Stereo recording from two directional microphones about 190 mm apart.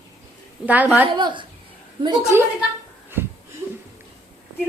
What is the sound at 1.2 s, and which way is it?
A woman's voice, 25° right (ahead or behind).